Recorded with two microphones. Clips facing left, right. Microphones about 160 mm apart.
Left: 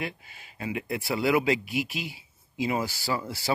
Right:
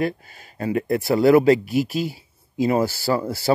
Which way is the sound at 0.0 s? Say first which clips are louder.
Right 11 dB; 40° right (ahead or behind).